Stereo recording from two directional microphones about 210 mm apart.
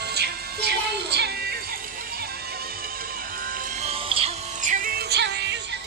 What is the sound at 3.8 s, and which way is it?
Music, 30° right (ahead or behind).